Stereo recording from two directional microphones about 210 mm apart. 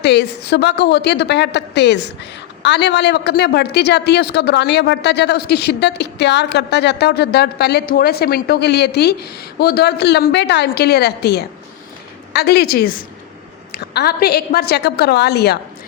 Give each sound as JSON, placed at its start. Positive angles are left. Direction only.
{"t": 0.0, "sound": "a woman's voice", "side_deg": 55}